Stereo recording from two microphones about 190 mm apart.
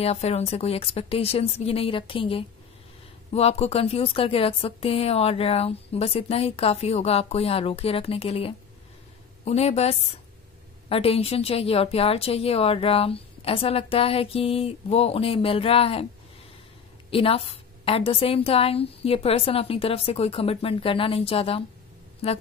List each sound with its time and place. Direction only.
0.0 s speech: 35° left (ahead or behind)
17.1 s a woman's voice: 30° left (ahead or behind)